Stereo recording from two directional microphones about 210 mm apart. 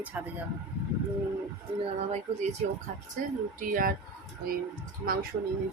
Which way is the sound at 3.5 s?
40° right (ahead or behind).